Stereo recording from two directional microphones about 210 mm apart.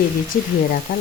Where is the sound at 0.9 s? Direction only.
40° left (ahead or behind).